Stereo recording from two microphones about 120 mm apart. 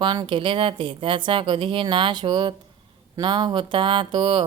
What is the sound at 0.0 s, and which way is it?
Speech, 40° right (ahead or behind).